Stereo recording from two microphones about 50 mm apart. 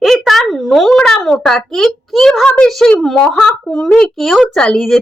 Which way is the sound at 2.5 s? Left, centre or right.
Left.